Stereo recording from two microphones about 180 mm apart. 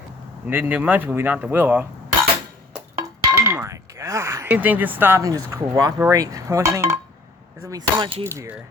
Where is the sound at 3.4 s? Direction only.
15° right (ahead or behind).